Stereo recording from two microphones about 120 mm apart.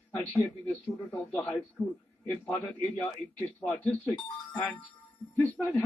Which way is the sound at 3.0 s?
20° left (ahead or behind).